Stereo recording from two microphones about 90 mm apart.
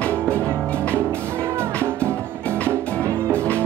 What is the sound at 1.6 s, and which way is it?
Music, 30° right (ahead or behind).